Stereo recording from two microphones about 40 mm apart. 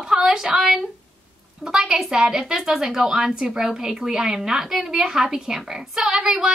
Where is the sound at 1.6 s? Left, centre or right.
Centre.